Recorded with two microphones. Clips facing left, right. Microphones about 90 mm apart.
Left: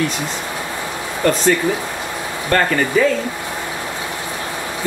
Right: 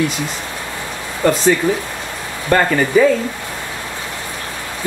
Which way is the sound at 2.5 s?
10° right (ahead or behind).